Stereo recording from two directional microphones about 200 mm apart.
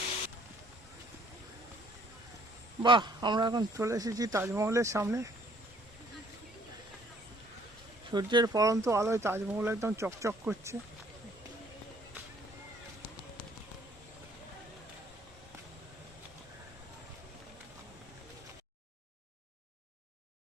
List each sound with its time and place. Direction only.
2.8 s speech: 25° right (ahead or behind)
8.1 s speech: 20° right (ahead or behind)